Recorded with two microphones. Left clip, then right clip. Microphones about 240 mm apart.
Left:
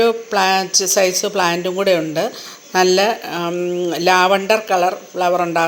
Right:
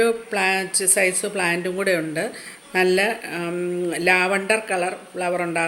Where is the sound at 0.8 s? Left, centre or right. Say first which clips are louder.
Left 4 dB; left.